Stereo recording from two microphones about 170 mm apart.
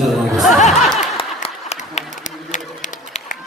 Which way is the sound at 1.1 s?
35° left (ahead or behind).